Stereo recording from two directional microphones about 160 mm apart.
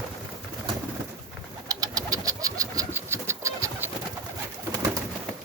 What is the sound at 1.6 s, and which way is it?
Pigeon, 25° right (ahead or behind).